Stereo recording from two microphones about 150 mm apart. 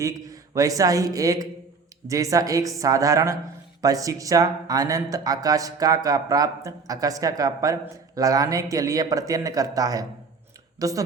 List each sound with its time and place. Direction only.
0.0 s speech: 20° right (ahead or behind)